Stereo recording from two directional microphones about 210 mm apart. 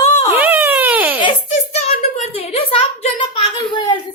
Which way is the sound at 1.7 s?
30° left (ahead or behind).